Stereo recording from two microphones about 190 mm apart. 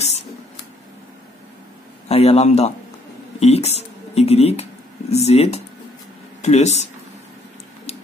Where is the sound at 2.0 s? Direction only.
30° left (ahead or behind).